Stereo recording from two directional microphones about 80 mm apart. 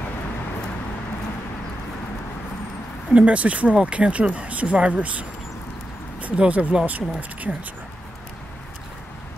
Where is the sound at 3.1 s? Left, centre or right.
Centre.